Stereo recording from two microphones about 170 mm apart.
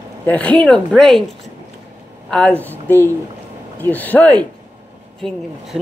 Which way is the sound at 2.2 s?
5° left (ahead or behind).